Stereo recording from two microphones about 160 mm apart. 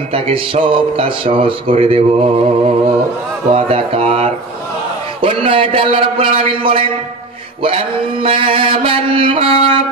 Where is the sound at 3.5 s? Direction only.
35° right (ahead or behind).